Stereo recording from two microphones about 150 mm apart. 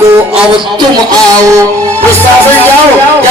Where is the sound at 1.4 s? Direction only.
20° right (ahead or behind).